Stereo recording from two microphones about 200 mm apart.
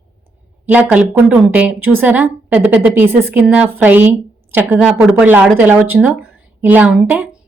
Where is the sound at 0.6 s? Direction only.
10° right (ahead or behind).